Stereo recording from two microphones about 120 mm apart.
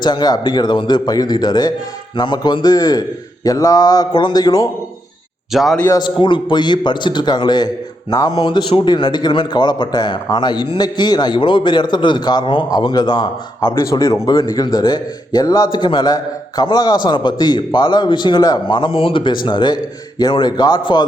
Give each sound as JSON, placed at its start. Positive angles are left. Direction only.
{"t": 0.0, "sound": "a man's voice", "side_deg": 35}
{"t": 5.5, "sound": "a man's voice", "side_deg": 0}
{"t": 6.0, "sound": "a man's voice", "side_deg": 40}
{"t": 14.0, "sound": "a man's voice", "side_deg": 25}